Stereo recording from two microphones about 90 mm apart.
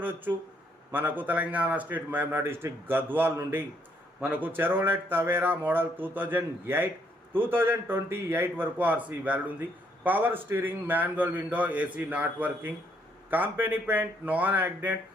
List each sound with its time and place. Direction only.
0.0 s a man's voice: 20° right (ahead or behind)